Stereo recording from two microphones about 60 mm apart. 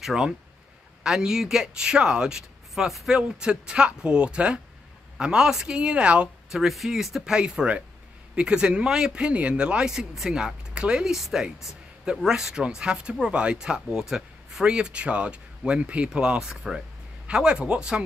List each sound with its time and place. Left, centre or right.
0.0 s speech: centre
6.5 s speech: centre
7.2 s speech: centre
14.7 s speech: centre